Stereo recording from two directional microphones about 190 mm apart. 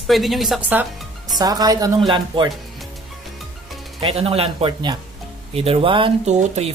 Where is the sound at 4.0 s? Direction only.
30° right (ahead or behind).